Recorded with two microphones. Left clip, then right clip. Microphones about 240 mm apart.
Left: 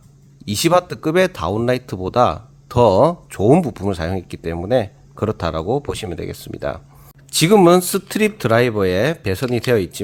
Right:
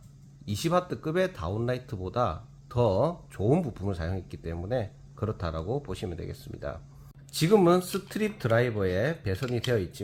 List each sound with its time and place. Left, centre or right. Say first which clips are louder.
0.4 s speech: left 12 dB; left